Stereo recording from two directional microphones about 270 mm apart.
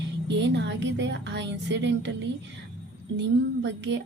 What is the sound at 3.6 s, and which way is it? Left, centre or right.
Speech, right.